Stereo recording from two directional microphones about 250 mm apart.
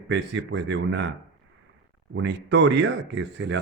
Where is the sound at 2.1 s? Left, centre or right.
Right.